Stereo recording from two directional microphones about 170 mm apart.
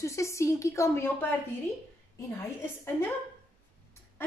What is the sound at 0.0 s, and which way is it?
A woman's voice, 15° left (ahead or behind).